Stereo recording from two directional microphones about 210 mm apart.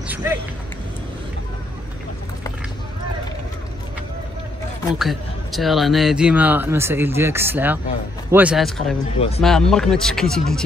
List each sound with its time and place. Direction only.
0.1 s a sound: 10° right (ahead or behind)
4.9 s a man's voice: centre (ahead or behind)
9.0 s speech: 30° left (ahead or behind)
9.4 s speech: centre (ahead or behind)